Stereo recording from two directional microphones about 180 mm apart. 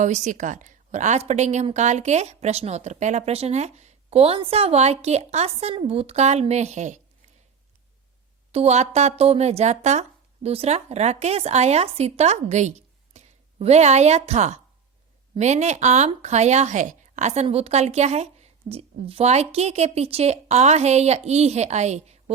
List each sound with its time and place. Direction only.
0.0 s a woman's voice: 45° right (ahead or behind)
8.5 s a woman's voice: 35° right (ahead or behind)